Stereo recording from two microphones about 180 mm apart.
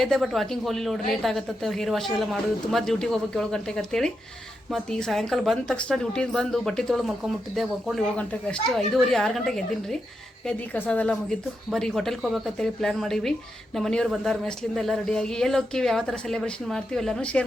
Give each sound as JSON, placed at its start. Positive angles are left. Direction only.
{"t": 0.0, "sound": "speech", "side_deg": 0}